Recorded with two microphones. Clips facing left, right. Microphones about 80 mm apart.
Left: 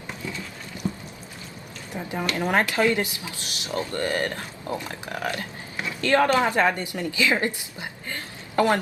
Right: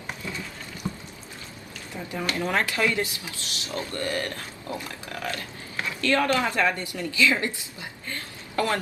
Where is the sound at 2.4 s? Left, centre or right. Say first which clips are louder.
Left 3 dB; left.